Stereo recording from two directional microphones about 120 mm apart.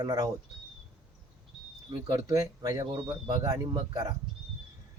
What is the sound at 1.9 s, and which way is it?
Speech, 30° right (ahead or behind).